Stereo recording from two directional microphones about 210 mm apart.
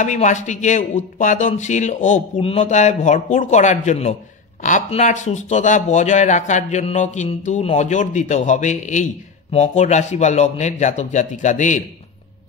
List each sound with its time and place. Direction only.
0.0 s speech: 35° left (ahead or behind)